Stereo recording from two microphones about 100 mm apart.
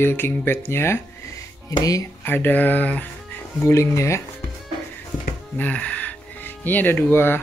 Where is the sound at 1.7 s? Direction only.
35° left (ahead or behind).